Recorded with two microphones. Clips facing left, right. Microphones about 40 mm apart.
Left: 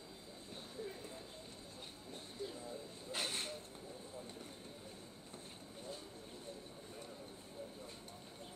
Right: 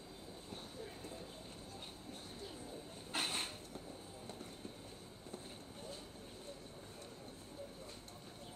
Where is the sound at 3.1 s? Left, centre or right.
Right.